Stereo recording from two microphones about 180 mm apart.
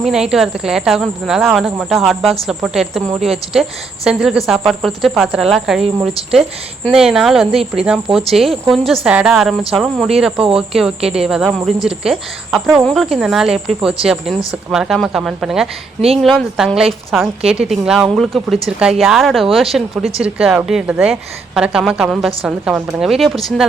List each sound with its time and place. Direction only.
0.0 s speech: 5° right (ahead or behind)
6.8 s speech: 5° right (ahead or behind)
7.5 s speech: 30° right (ahead or behind)
7.9 s speech: centre (ahead or behind)